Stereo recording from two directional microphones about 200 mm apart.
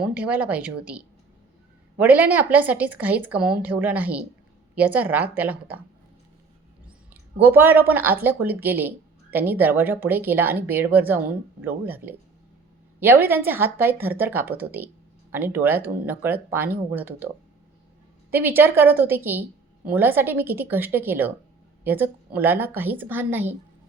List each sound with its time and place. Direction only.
0.0 s a woman's voice: 5° right (ahead or behind)
7.1 s a woman's voice: 10° right (ahead or behind)